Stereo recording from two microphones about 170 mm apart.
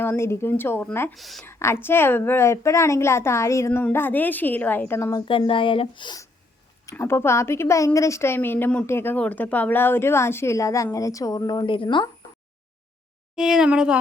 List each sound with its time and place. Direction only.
0.0 s a woman's voice: 15° left (ahead or behind)
1.1 s a woman's voice: centre (ahead or behind)
1.5 s a woman's voice: 15° left (ahead or behind)
5.2 s speech: 30° left (ahead or behind)
6.8 s a woman's voice: 15° left (ahead or behind)
13.3 s a woman's voice: 5° right (ahead or behind)